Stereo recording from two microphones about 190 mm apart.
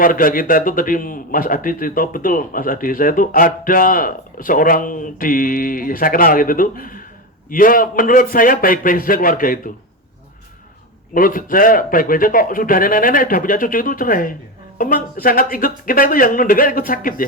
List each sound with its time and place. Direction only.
0.0 s a man's voice: 45° left (ahead or behind)
11.1 s a man's voice: 50° left (ahead or behind)